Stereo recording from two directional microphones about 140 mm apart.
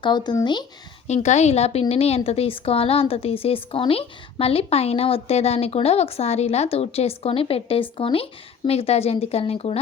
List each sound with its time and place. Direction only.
0.0 s speech: 30° left (ahead or behind)
1.0 s a woman's voice: 55° left (ahead or behind)